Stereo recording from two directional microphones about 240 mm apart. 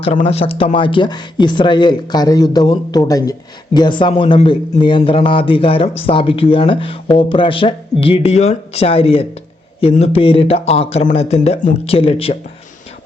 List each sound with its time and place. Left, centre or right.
0.0 s a man's voice: left